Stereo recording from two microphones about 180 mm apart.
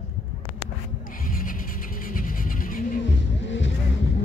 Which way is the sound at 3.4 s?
90° left.